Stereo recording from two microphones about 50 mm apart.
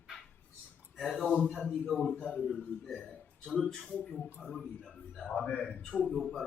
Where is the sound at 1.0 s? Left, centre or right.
Centre.